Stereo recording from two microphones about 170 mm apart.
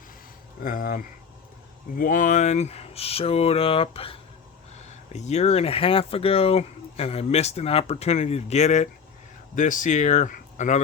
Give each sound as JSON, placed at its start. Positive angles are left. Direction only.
{"t": 0.6, "sound": "speech", "side_deg": 55}